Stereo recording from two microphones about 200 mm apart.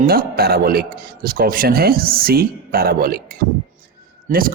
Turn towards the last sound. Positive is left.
turn(degrees=-45)  # may be behind; listen again after turning